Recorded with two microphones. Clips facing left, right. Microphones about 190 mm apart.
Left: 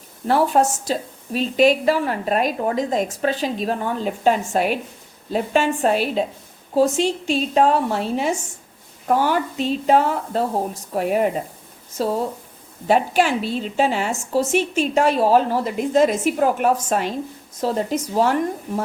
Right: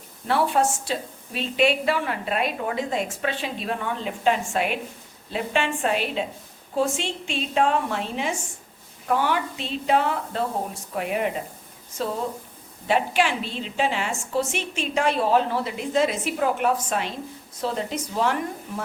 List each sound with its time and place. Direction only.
0.3 s a woman's voice: 40° left (ahead or behind)
12.9 s a woman's voice: 40° left (ahead or behind)